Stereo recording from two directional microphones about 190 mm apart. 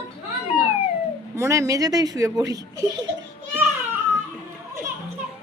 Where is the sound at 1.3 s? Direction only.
15° right (ahead or behind).